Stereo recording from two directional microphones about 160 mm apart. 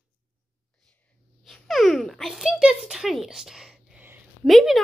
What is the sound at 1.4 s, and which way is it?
A child's voice, centre (ahead or behind).